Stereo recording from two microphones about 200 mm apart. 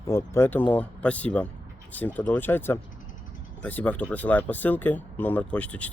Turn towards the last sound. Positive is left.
turn(degrees=5)  # may be behind; listen again after turning